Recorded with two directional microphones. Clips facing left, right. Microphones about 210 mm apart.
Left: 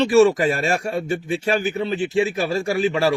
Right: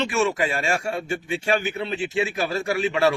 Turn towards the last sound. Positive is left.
turn(degrees=35)  # may be behind; listen again after turning